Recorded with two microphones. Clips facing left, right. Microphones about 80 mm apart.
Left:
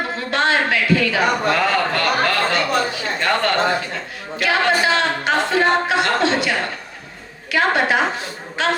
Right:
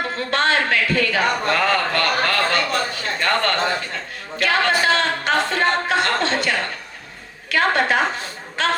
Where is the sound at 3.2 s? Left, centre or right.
Right.